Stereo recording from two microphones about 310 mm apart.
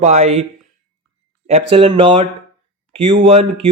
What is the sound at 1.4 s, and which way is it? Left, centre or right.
A man's voice, centre.